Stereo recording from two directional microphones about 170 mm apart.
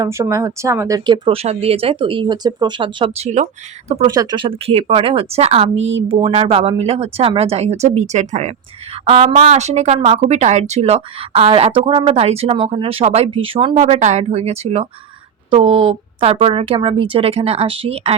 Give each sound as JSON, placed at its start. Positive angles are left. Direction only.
{"t": 0.0, "sound": "speech", "side_deg": -15}
{"t": 4.0, "sound": "speech", "side_deg": -25}
{"t": 13.7, "sound": "speech", "side_deg": -45}